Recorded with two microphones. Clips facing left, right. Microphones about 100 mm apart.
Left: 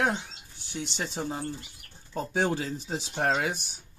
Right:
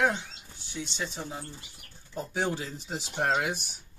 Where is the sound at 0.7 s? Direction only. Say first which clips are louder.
Left 2 dB; 70° left (ahead or behind).